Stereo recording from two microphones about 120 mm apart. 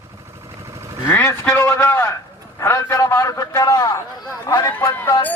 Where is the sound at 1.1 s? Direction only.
20° left (ahead or behind).